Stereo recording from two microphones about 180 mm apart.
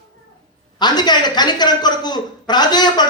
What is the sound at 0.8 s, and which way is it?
A man's voice, 25° left (ahead or behind).